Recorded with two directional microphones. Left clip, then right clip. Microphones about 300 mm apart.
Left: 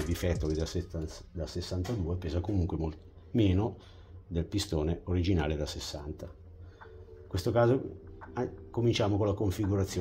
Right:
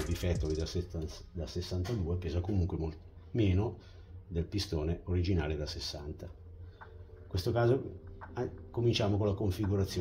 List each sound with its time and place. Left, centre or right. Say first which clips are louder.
0.1 s speech: left 3 dB; left
7.3 s speech: left 4 dB; left